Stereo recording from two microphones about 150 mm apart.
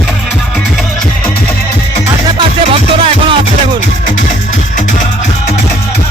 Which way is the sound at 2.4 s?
35° right (ahead or behind).